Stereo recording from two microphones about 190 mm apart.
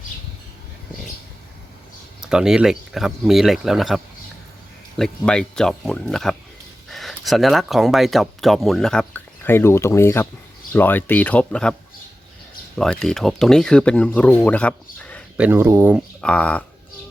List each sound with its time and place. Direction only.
2.2 s speech: 5° right (ahead or behind)
12.7 s speech: 5° left (ahead or behind)
15.4 s speech: 10° right (ahead or behind)
16.0 s speech: 5° left (ahead or behind)